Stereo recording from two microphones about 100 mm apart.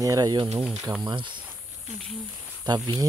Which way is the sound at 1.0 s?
50° right (ahead or behind).